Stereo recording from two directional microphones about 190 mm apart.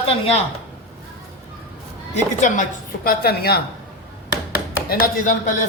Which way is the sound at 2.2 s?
40° left (ahead or behind).